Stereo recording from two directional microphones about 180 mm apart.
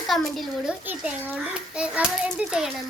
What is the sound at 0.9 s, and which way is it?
A child's voice, 10° right (ahead or behind).